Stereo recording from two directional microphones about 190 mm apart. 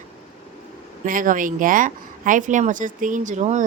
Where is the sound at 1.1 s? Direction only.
45° right (ahead or behind).